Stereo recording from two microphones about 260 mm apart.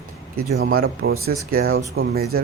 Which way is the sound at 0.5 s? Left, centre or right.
Right.